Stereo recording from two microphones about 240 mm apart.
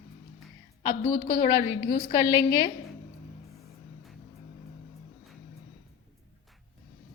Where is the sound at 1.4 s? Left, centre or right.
Centre.